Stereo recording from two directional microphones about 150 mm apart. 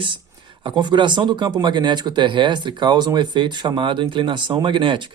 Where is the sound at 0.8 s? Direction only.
30° right (ahead or behind).